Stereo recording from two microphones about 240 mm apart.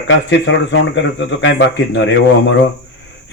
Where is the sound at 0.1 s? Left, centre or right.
Left.